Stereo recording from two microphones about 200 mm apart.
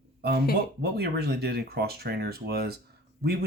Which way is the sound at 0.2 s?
55° right (ahead or behind).